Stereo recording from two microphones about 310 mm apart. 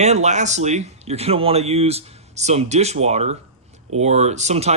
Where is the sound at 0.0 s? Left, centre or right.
Right.